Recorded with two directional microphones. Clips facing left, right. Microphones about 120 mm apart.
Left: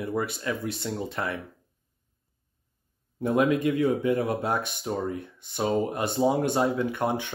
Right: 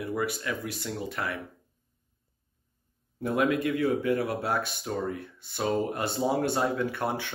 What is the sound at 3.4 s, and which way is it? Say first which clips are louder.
Speech: even; 20° left (ahead or behind).